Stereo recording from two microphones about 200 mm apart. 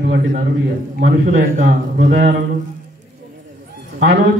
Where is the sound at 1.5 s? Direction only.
45° right (ahead or behind).